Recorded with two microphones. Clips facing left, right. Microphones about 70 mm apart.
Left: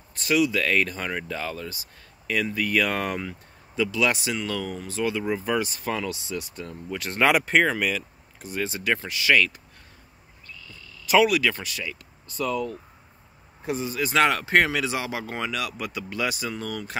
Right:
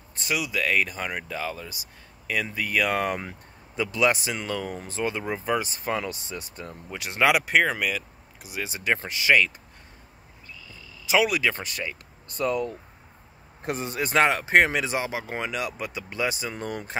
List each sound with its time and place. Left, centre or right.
0.3 s speech: centre
3.2 s speech: right
6.9 s speech: centre
7.2 s speech: centre
8.6 s speech: right
10.7 s speech: centre; by 12.5 s right
13.7 s speech: right
14.1 s speech: right
16.5 s speech: right